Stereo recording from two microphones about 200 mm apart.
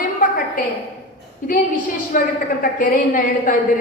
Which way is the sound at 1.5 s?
45° left (ahead or behind).